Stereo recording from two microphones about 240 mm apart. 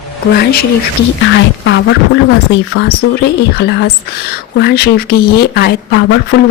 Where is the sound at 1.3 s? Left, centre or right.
Left.